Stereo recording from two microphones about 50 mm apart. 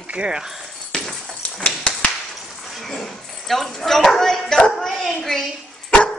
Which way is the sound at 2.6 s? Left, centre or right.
Centre.